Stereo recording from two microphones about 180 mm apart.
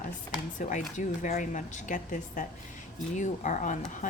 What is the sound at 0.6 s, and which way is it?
Speech, 45° left (ahead or behind).